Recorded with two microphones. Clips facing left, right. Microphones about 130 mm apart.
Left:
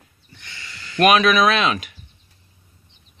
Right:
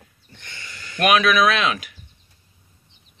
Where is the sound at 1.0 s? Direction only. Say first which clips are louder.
Left 2 dB; centre (ahead or behind).